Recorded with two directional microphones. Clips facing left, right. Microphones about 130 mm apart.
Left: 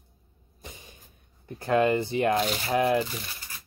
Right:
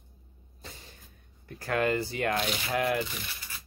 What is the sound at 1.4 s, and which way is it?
Speech, 20° left (ahead or behind).